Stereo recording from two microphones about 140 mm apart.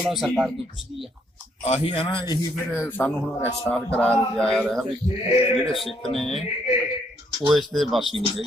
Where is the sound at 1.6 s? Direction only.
45° left (ahead or behind).